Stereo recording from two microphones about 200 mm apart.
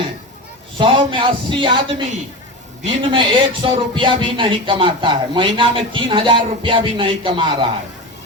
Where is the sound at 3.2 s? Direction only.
25° right (ahead or behind).